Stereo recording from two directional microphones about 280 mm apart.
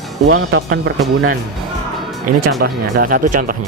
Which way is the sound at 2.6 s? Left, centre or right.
Right.